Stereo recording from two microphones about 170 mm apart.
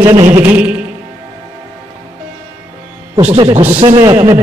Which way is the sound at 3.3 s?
35° right (ahead or behind).